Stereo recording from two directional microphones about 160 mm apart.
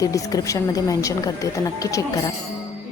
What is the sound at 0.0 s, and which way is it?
A woman's voice, 20° left (ahead or behind).